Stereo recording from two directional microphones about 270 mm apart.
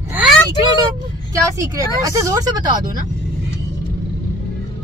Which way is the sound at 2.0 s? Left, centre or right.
Centre.